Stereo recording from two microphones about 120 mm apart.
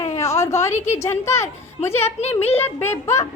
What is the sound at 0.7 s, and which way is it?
Speech, 70° left (ahead or behind).